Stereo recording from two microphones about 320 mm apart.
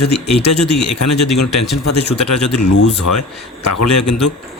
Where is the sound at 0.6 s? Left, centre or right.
Left.